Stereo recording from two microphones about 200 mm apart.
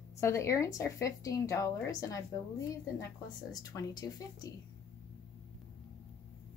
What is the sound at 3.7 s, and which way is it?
Speech, 20° left (ahead or behind).